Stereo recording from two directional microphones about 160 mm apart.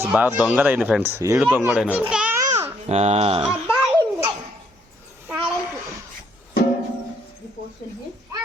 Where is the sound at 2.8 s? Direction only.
45° right (ahead or behind).